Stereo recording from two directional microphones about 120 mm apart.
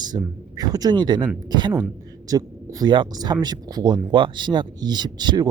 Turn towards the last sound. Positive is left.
turn(degrees=-35)  # may be behind; listen again after turning